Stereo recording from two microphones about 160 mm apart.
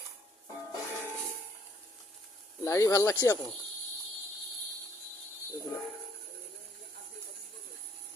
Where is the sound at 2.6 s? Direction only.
20° left (ahead or behind).